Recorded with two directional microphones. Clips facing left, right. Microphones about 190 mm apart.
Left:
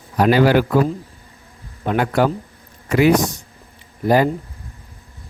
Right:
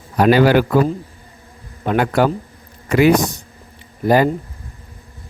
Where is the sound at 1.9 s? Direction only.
65° right (ahead or behind).